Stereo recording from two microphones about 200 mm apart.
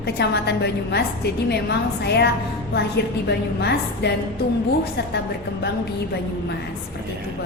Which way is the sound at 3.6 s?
55° left (ahead or behind).